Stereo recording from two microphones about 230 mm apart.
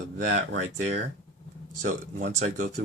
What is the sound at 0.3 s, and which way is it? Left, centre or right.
Speech, right.